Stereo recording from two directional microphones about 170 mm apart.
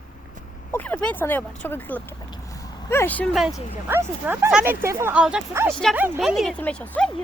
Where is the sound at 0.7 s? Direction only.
10° left (ahead or behind).